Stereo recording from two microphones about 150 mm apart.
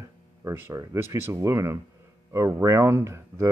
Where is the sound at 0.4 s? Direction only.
15° right (ahead or behind).